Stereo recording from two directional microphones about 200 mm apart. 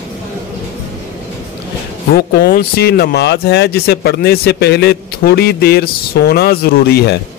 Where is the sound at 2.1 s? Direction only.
55° left (ahead or behind).